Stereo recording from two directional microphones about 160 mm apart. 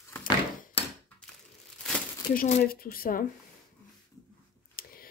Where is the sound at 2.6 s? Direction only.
65° left (ahead or behind).